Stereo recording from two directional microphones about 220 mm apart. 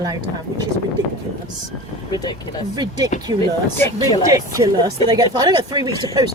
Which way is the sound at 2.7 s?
15° right (ahead or behind).